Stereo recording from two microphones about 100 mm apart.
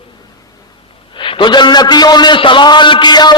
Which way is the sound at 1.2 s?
55° left (ahead or behind).